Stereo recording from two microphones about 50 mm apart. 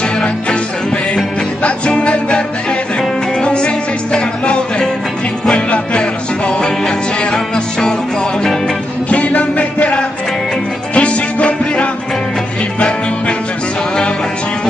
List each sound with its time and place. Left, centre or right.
1.6 s music: left
3.4 s music: left
9.1 s music: left